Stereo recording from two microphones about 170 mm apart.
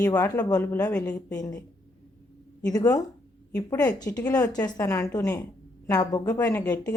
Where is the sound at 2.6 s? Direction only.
20° left (ahead or behind).